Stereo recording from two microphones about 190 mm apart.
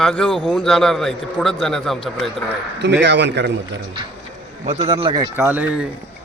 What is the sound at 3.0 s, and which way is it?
Speech, 65° right (ahead or behind).